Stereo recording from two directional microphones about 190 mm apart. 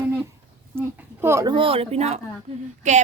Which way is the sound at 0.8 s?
10° right (ahead or behind).